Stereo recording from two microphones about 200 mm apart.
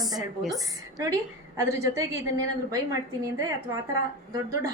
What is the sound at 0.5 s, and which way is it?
A woman's voice, 20° right (ahead or behind).